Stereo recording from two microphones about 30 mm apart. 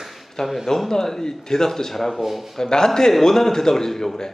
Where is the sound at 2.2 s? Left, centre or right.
Centre.